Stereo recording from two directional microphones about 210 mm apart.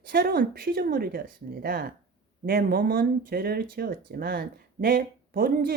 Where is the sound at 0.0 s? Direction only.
45° right (ahead or behind).